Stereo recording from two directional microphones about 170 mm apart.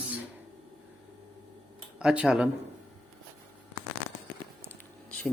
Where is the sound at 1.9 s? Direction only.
5° right (ahead or behind).